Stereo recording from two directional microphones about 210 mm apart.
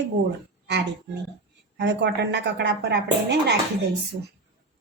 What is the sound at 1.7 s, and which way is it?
A woman's voice, 55° right (ahead or behind).